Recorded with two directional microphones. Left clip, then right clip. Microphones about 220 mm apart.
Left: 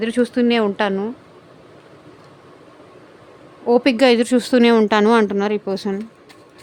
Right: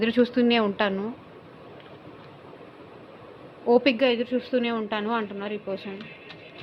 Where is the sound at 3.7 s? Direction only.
35° left (ahead or behind); by 5.9 s 50° left (ahead or behind).